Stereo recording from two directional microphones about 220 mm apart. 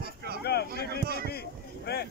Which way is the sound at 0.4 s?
45° left (ahead or behind).